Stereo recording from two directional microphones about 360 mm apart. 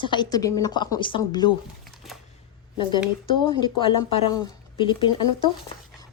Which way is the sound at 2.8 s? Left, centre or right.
Centre.